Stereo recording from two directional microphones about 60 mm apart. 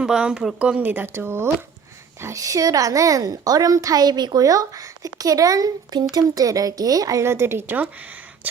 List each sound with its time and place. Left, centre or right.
0.0 s speech: centre
0.8 s speech: right
1.0 s a woman's voice: right
2.3 s a woman's voice: right
7.2 s a woman's voice: right